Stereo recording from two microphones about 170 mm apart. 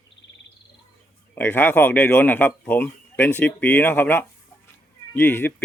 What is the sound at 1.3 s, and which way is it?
Speech, 10° left (ahead or behind).